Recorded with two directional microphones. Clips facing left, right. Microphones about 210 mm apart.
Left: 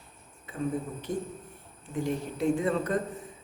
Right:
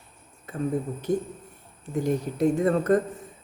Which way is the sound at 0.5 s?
45° right (ahead or behind).